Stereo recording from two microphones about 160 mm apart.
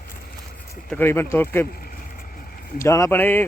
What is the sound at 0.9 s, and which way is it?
Speech, 15° left (ahead or behind).